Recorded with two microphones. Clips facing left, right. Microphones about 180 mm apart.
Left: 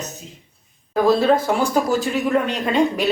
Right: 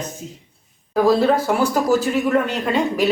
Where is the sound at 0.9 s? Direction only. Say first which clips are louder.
Even; 10° right (ahead or behind).